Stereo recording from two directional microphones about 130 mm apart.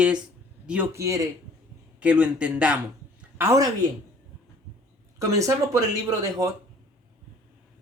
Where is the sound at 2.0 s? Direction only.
10° right (ahead or behind).